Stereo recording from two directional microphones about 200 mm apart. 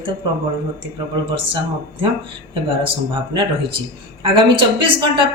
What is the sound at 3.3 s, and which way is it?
A man's voice, 25° right (ahead or behind).